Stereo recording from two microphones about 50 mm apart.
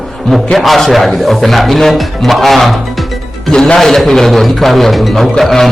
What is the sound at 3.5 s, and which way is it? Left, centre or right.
A man's voice, centre.